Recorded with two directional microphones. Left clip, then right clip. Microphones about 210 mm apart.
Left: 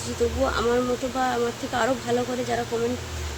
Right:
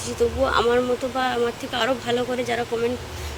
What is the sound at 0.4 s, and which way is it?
Speech, 25° right (ahead or behind).